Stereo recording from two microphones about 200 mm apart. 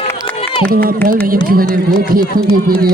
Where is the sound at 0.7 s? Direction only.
50° right (ahead or behind).